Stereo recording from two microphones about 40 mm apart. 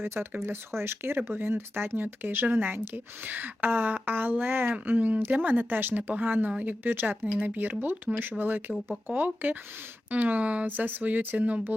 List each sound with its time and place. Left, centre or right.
0.0 s speech: right
4.7 s speech: right
10.7 s speech: right
11.3 s speech: right